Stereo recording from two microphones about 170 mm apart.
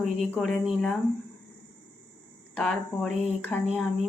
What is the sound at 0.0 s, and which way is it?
Speech, 5° left (ahead or behind).